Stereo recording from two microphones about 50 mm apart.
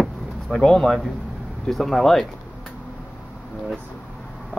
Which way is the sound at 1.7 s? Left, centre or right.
Centre.